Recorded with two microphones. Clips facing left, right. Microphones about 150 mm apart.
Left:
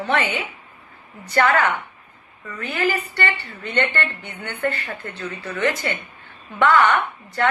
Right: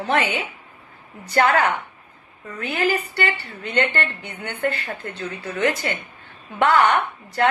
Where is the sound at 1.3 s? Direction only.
35° right (ahead or behind).